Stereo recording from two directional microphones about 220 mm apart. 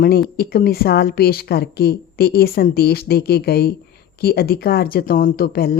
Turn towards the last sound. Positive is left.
turn(degrees=45)  # may be behind; listen again after turning